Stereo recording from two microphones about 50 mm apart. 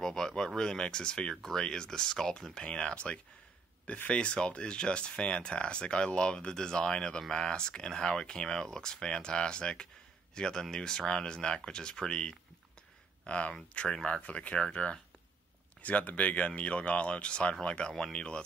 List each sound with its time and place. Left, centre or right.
0.0 s a sound: centre
0.6 s speech: centre
2.5 s speech: centre
14.2 s speech: left